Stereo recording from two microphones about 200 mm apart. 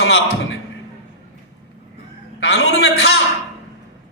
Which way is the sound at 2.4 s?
75° left (ahead or behind).